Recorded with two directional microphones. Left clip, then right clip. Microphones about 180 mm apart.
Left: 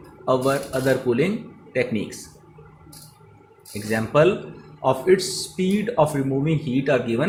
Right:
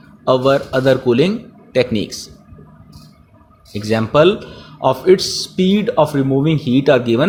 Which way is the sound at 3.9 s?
45° right (ahead or behind).